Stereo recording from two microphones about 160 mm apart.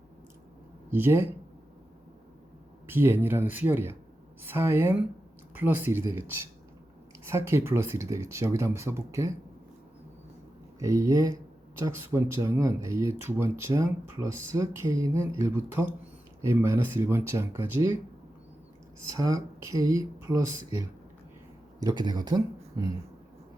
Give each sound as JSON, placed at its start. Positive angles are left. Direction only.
{"t": 0.9, "sound": "speech", "side_deg": -15}
{"t": 2.8, "sound": "speech", "side_deg": -15}
{"t": 10.8, "sound": "speech", "side_deg": -20}
{"t": 18.9, "sound": "speech", "side_deg": -20}